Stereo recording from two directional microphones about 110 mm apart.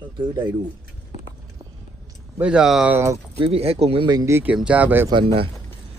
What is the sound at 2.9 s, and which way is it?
Speech, 25° right (ahead or behind).